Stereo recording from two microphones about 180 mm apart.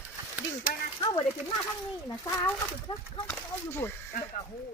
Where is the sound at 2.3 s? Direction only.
25° left (ahead or behind).